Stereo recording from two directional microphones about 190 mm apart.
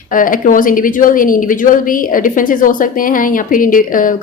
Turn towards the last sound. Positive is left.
turn(degrees=45)  # may be behind; listen again after turning